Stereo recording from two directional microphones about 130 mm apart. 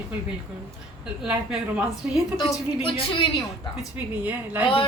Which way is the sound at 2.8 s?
45° left (ahead or behind).